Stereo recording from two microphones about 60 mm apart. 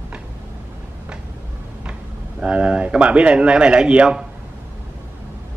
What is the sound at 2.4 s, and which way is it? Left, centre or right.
Speech, right.